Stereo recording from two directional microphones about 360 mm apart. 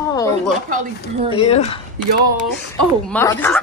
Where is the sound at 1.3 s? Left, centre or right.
Centre.